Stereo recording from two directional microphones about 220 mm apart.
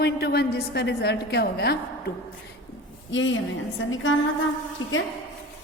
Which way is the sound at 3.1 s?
60° left (ahead or behind).